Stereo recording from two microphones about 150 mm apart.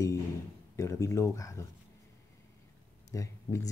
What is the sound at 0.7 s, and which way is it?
Speech, 20° left (ahead or behind).